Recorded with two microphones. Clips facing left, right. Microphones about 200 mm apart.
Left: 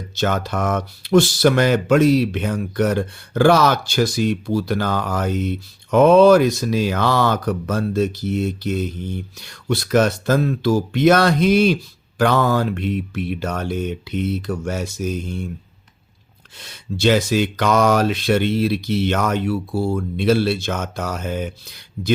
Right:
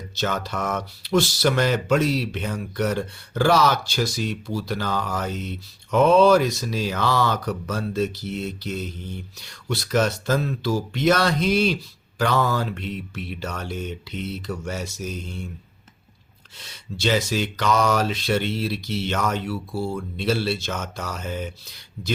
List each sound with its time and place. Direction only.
0.2 s speech: 50° left (ahead or behind)
16.6 s speech: 55° left (ahead or behind)